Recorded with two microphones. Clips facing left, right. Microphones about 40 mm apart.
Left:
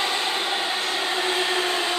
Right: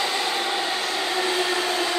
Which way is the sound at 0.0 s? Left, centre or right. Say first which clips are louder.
Even; left.